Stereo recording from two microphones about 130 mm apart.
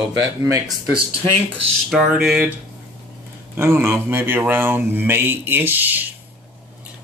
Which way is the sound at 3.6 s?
20° right (ahead or behind).